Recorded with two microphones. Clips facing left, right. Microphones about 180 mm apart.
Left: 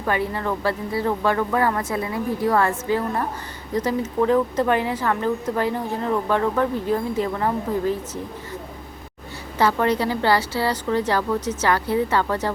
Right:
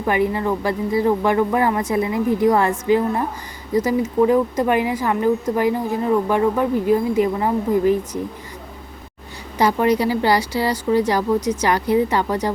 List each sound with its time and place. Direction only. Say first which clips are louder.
0.0 s speech: right 5 dB; 15° right (ahead or behind)
9.6 s speech: right 3 dB; 15° right (ahead or behind)